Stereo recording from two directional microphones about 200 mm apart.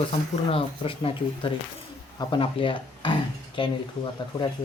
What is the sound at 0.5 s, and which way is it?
Speech, 25° left (ahead or behind).